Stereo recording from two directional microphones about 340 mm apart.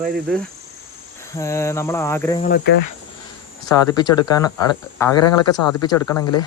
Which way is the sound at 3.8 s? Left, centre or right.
Centre.